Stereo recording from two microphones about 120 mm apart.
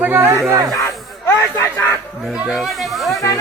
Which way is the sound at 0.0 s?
15° right (ahead or behind).